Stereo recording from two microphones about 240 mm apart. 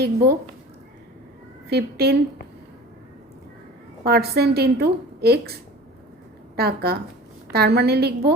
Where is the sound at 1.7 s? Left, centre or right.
Right.